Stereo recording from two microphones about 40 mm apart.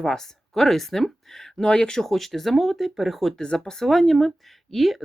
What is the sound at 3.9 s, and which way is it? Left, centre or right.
Speech, centre.